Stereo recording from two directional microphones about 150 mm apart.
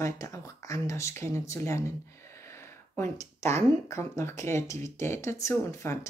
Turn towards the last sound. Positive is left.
turn(degrees=20)  # may be behind; listen again after turning